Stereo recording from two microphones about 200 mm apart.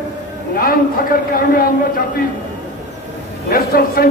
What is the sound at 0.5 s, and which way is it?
A man's voice, 45° left (ahead or behind).